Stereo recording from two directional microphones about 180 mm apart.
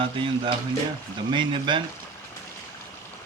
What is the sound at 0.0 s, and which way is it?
Speech, 30° right (ahead or behind).